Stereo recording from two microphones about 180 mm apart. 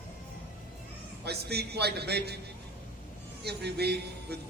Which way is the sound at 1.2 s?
65° right (ahead or behind).